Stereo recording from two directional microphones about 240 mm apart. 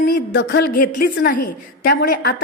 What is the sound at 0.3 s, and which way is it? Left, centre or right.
A woman's voice, left.